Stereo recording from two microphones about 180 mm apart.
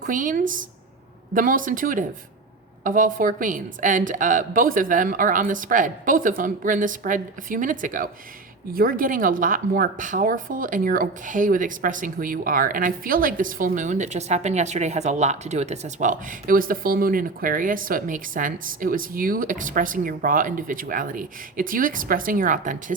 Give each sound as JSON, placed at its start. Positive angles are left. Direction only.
{"t": 0.0, "sound": "a woman's voice", "side_deg": -45}